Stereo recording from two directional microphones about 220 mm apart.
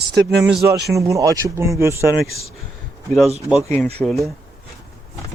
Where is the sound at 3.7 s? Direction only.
5° left (ahead or behind).